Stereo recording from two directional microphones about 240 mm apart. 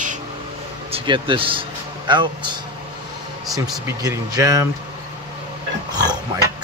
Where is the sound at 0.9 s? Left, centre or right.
Right.